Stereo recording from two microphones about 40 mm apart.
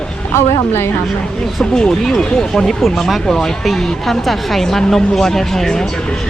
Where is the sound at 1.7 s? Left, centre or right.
Centre.